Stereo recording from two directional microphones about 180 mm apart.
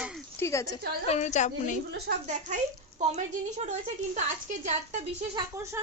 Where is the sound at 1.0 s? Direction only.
40° left (ahead or behind).